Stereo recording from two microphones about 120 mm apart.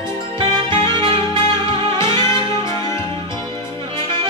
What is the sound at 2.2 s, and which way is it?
Music, 25° left (ahead or behind).